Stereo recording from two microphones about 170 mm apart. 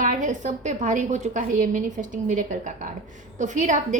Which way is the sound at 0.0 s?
50° right (ahead or behind).